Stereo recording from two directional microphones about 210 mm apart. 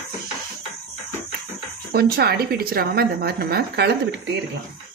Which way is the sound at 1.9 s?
50° right (ahead or behind).